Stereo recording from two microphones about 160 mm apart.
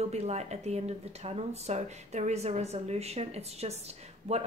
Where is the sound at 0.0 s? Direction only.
45° right (ahead or behind).